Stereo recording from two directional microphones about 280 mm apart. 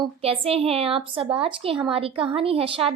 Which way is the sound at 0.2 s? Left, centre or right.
Right.